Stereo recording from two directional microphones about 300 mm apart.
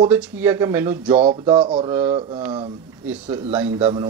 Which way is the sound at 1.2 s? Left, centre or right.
Centre.